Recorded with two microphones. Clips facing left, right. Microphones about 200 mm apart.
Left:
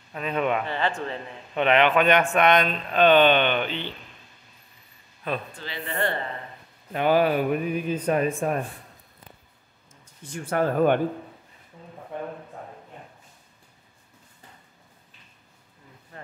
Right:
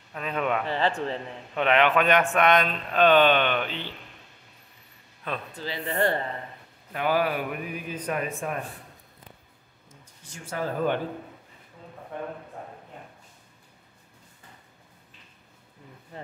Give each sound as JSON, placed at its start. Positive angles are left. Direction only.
{"t": 0.1, "sound": "speech", "side_deg": 0}
{"t": 0.7, "sound": "a man's voice", "side_deg": -35}
{"t": 1.5, "sound": "speech", "side_deg": 0}
{"t": 5.2, "sound": "a man's voice", "side_deg": 5}
{"t": 5.6, "sound": "a man's voice", "side_deg": -40}
{"t": 6.9, "sound": "speech", "side_deg": 25}
{"t": 10.2, "sound": "speech", "side_deg": 55}